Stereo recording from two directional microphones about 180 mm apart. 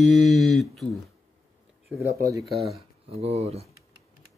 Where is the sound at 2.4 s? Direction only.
Centre (ahead or behind).